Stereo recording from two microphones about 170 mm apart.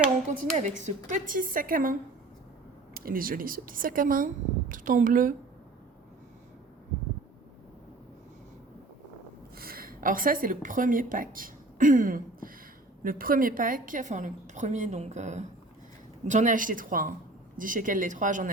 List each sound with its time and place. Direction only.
0.5 s a woman's voice: 40° right (ahead or behind)
9.6 s a woman's voice: 60° right (ahead or behind)